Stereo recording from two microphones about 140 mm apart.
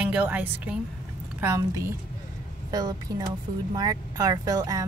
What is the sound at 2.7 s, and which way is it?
Speech, 30° right (ahead or behind).